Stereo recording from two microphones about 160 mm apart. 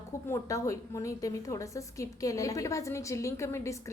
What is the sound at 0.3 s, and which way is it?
A woman's voice, 20° left (ahead or behind).